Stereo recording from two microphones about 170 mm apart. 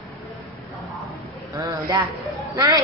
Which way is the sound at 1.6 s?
20° right (ahead or behind).